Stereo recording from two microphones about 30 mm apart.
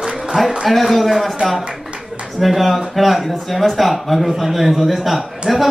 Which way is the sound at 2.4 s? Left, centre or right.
Centre.